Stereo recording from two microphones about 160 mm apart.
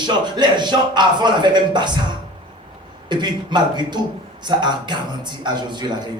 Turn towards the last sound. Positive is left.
turn(degrees=-25)  # may be behind; listen again after turning